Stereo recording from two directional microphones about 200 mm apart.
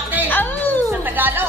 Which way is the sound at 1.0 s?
10° right (ahead or behind).